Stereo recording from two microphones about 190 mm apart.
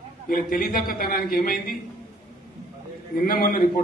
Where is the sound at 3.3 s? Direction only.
50° left (ahead or behind).